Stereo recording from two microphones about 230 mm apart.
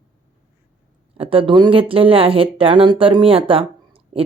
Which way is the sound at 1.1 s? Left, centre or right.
Right.